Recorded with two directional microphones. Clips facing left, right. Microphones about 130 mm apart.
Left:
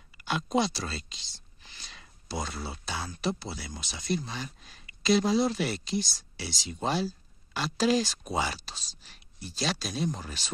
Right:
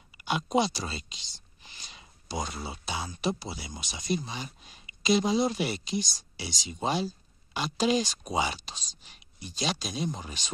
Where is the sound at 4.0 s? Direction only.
20° right (ahead or behind).